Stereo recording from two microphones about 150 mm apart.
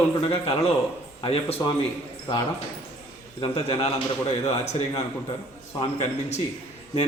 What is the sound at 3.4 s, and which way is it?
A man's voice, 40° left (ahead or behind).